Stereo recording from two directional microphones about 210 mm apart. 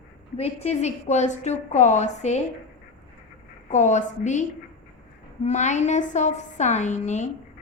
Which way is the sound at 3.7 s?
35° left (ahead or behind).